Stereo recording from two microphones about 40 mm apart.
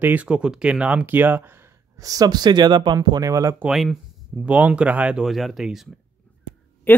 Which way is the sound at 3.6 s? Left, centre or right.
Right.